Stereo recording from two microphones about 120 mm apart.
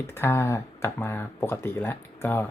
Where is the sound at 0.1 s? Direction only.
20° left (ahead or behind).